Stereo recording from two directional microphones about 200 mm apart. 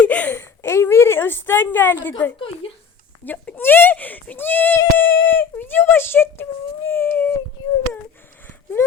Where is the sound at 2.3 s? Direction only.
25° left (ahead or behind).